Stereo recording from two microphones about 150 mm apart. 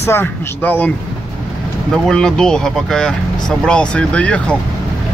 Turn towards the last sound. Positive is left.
turn(degrees=10)  # may be behind; listen again after turning